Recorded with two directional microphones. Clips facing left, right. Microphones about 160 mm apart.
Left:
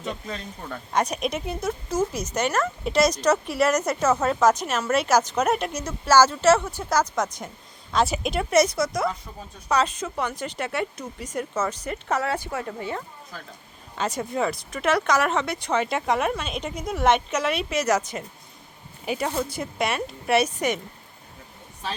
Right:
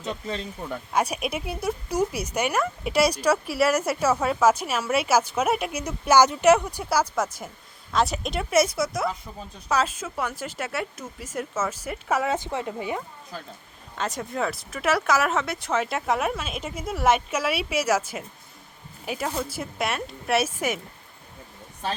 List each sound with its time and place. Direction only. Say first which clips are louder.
0.7 s speech: left 1 dB; 10° right (ahead or behind)
12.3 s speech: right 1 dB; 20° right (ahead or behind)
13.9 s speech: left 3 dB; centre (ahead or behind)